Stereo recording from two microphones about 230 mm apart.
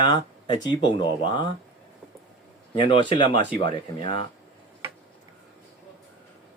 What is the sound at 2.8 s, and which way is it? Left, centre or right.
Speech, left.